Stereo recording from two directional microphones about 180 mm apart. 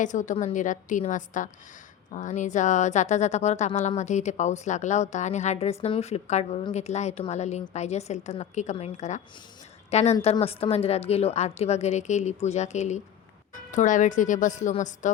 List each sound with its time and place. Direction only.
0.0 s a woman's voice: 45° left (ahead or behind)